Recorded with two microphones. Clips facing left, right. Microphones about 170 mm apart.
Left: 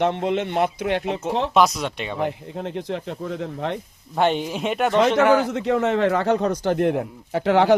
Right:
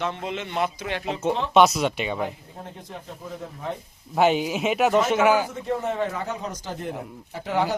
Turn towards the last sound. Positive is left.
turn(degrees=70)  # may be behind; listen again after turning